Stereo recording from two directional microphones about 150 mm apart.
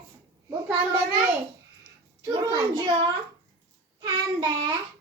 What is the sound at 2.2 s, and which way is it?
Speech, 30° right (ahead or behind).